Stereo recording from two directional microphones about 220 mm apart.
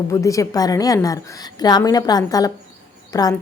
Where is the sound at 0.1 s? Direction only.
15° left (ahead or behind).